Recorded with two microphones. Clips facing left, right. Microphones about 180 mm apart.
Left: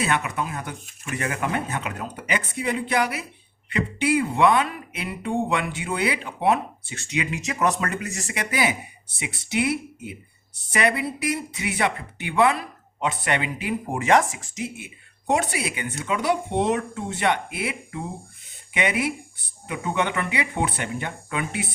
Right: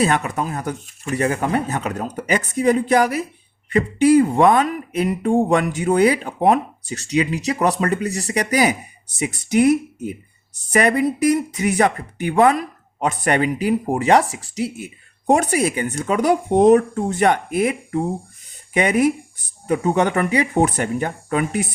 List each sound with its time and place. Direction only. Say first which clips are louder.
0.0 s speech: right 6 dB; 40° right (ahead or behind)